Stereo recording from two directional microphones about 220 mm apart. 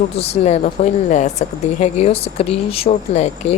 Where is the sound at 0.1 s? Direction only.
30° left (ahead or behind).